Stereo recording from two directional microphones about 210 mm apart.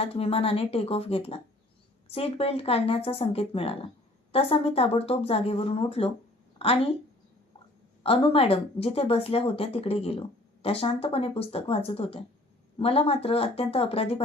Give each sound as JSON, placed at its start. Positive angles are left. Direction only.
{"t": 0.0, "sound": "speech", "side_deg": 25}
{"t": 8.0, "sound": "speech", "side_deg": 25}